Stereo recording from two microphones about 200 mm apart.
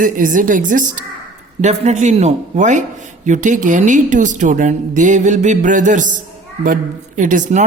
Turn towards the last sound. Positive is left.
turn(degrees=-40)  # may be behind; listen again after turning